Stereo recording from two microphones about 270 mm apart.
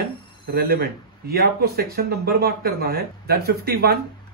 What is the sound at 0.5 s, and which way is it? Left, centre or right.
A man's voice, right.